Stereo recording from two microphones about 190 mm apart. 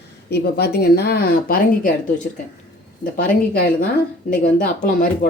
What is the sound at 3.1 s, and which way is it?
Speech, 55° left (ahead or behind).